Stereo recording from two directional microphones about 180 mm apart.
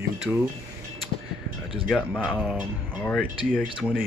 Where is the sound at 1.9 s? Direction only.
5° left (ahead or behind).